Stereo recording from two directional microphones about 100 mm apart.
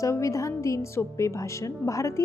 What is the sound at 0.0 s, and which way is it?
Speech, 30° left (ahead or behind).